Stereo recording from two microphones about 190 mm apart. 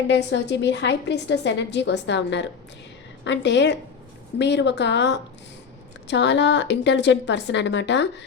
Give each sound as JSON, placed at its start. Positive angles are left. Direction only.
{"t": 0.1, "sound": "a woman's voice", "side_deg": 65}